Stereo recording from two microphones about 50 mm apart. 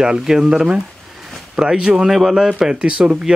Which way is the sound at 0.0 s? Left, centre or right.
Centre.